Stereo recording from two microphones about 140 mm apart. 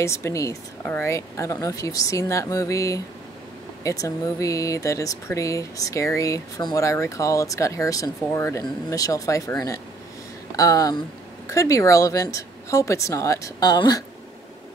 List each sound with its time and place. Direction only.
0.0 s speech: 20° left (ahead or behind)